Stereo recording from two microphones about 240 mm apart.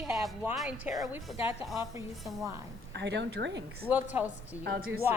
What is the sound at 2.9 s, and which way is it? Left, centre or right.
Speech, right.